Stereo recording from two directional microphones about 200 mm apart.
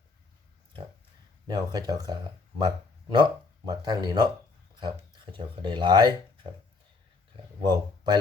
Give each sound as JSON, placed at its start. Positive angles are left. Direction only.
{"t": 1.5, "sound": "speech", "side_deg": -20}
{"t": 7.7, "sound": "speech", "side_deg": -20}